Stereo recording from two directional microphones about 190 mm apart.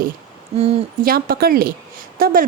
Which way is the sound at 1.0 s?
50° right (ahead or behind).